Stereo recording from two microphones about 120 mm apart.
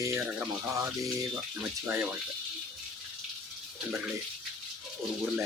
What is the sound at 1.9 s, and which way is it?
Speech, 15° right (ahead or behind).